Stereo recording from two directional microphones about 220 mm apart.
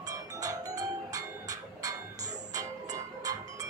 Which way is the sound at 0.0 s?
15° right (ahead or behind).